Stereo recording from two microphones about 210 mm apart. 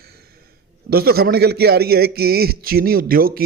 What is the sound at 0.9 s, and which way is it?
A man's voice, 45° right (ahead or behind).